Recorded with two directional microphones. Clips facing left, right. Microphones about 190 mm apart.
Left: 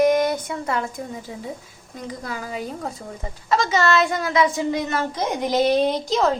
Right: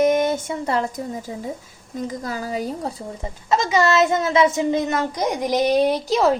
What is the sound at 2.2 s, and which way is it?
Speech, 35° right (ahead or behind).